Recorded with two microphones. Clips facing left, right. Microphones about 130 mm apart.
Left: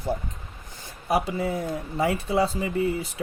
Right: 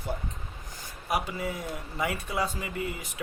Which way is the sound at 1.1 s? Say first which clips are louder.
Left 6 dB; 30° left (ahead or behind).